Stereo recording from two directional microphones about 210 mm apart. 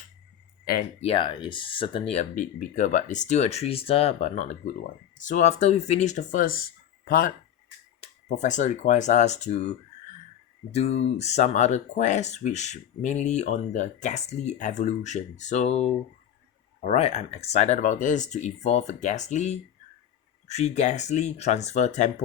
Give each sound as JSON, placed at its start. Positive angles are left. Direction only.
{"t": 1.0, "sound": "speech", "side_deg": 25}
{"t": 8.4, "sound": "speech", "side_deg": 35}